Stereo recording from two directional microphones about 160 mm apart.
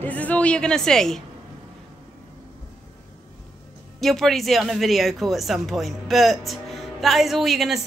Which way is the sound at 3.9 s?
Centre (ahead or behind).